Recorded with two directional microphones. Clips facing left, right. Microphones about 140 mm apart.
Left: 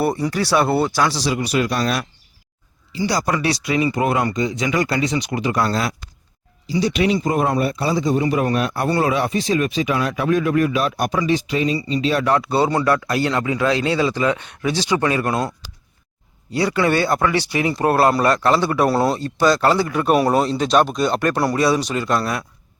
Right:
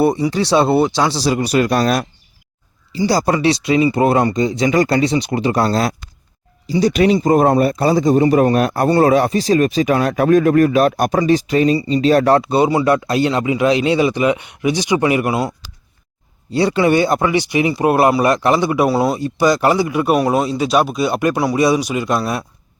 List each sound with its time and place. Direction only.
0.0 s speech: 20° right (ahead or behind)
1.2 s speech: 40° right (ahead or behind)
3.1 s speech: 30° right (ahead or behind)
12.4 s speech: 20° right (ahead or behind)
16.5 s speech: 25° right (ahead or behind)
18.9 s speech: centre (ahead or behind)
19.2 s speech: 15° right (ahead or behind)
20.1 s speech: centre (ahead or behind)